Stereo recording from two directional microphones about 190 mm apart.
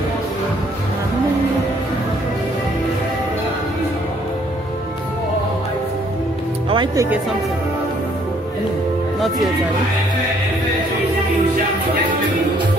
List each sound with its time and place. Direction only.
6.7 s speech: 25° right (ahead or behind)